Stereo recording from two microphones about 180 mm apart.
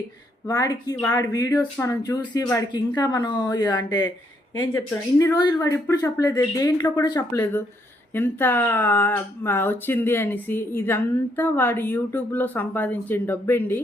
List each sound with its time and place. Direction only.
0.4 s speech: 20° left (ahead or behind)
5.2 s speech: 20° left (ahead or behind)